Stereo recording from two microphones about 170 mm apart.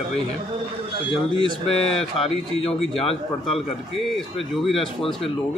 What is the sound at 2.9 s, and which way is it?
Speech, 35° left (ahead or behind).